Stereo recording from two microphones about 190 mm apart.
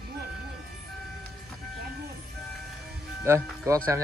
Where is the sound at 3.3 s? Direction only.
15° right (ahead or behind).